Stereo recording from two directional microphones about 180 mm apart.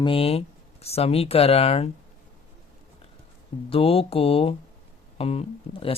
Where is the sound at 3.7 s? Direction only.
30° left (ahead or behind).